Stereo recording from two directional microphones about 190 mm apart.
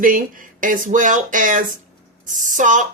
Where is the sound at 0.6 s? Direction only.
45° right (ahead or behind).